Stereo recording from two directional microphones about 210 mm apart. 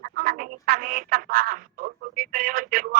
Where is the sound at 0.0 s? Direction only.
45° right (ahead or behind).